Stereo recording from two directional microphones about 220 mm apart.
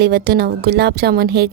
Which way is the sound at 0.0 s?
45° right (ahead or behind).